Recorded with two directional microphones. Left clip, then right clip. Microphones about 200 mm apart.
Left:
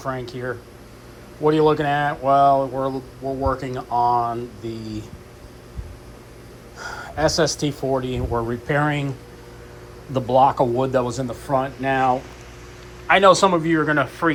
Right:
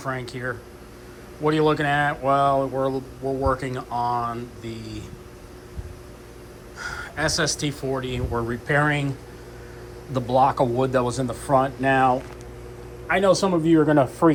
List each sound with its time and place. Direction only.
0.0 s speech: 15° left (ahead or behind)
6.7 s speech: 15° left (ahead or behind); by 13.6 s 5° right (ahead or behind)
13.7 s speech: 15° right (ahead or behind)